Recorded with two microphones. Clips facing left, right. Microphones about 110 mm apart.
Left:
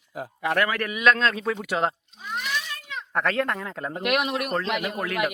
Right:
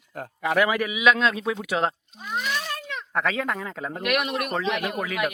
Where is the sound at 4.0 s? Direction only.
25° left (ahead or behind).